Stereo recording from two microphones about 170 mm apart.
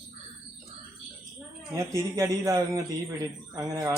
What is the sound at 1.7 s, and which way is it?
Speech, 20° right (ahead or behind).